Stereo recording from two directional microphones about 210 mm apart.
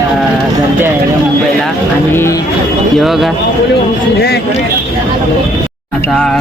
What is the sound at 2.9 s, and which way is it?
Speech, centre (ahead or behind).